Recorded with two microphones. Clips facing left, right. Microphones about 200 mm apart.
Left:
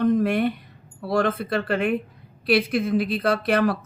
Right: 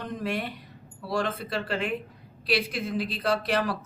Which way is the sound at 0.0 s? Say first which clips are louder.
Left 11 dB; 55° left (ahead or behind).